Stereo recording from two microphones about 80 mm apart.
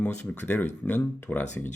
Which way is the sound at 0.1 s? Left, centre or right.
Left.